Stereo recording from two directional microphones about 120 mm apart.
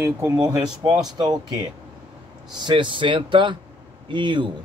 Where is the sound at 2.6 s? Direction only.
45° right (ahead or behind).